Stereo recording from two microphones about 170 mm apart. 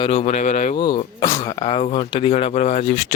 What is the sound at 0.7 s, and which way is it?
Speech, 25° left (ahead or behind).